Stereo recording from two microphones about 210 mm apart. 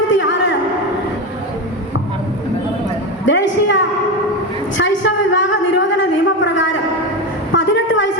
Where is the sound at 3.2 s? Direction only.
60° left (ahead or behind).